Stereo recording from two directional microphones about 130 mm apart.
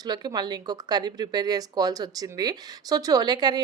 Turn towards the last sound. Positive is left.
turn(degrees=-35)  # may be behind; listen again after turning